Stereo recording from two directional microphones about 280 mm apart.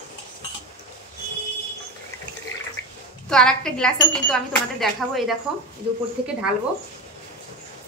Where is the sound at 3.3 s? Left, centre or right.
Centre.